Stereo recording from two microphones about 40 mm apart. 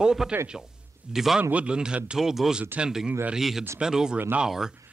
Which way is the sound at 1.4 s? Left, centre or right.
Right.